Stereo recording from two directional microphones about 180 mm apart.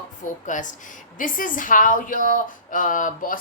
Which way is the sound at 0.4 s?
45° left (ahead or behind).